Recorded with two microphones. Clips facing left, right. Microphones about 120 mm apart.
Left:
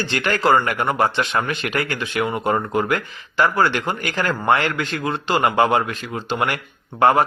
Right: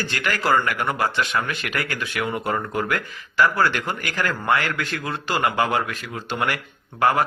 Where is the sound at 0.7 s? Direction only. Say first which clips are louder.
Left 4 dB; 40° left (ahead or behind).